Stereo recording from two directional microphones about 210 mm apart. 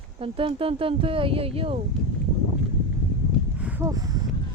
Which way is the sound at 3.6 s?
5° right (ahead or behind).